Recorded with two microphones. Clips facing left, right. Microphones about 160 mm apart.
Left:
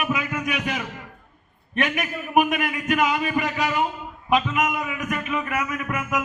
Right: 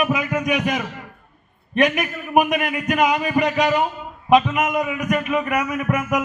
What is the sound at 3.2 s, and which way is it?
Music, 30° right (ahead or behind).